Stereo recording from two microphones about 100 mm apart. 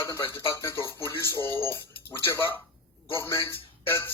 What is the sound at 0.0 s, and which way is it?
Speech, 25° left (ahead or behind).